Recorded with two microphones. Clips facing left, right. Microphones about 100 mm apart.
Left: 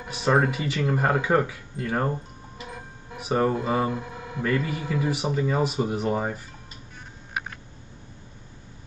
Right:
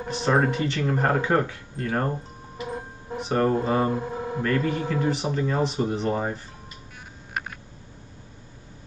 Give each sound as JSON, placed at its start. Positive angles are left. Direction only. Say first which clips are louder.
{"t": 0.1, "sound": "speech", "louder": "even", "side_deg": 5}
{"t": 2.6, "sound": "music", "louder": "right 7 dB", "side_deg": -35}
{"t": 3.2, "sound": "speech", "louder": "right 1 dB", "side_deg": 5}
{"t": 3.9, "sound": "speech", "louder": "right 5 dB", "side_deg": -40}
{"t": 4.4, "sound": "speech", "louder": "right 1 dB", "side_deg": 5}